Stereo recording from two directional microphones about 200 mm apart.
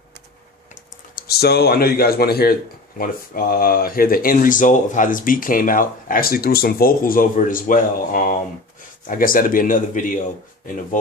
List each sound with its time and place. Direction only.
1.1 s speech: 50° left (ahead or behind)